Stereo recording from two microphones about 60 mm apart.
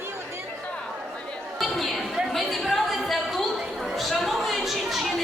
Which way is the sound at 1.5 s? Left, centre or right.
Centre.